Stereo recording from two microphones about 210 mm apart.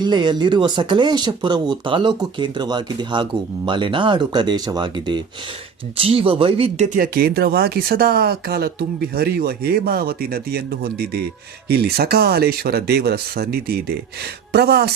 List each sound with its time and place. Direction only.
0.0 s speech: 20° right (ahead or behind)
6.9 s speech: 45° right (ahead or behind)